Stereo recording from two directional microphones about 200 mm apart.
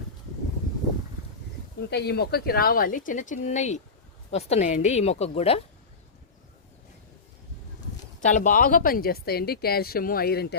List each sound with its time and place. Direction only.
1.9 s a woman's voice: 55° left (ahead or behind); by 5.6 s 30° left (ahead or behind)
8.2 s a woman's voice: 40° left (ahead or behind)